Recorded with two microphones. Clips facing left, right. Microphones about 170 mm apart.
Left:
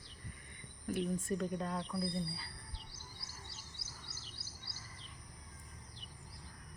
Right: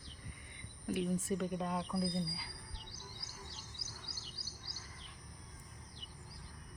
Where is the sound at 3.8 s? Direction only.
55° right (ahead or behind).